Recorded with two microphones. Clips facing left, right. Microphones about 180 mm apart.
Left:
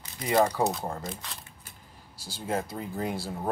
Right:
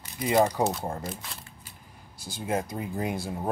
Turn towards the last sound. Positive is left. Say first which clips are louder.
# right 1 dB
turn(degrees=-15)  # may be behind; listen again after turning